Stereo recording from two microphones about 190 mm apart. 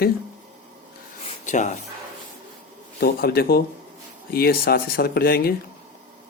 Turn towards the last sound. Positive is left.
turn(degrees=55)  # may be behind; listen again after turning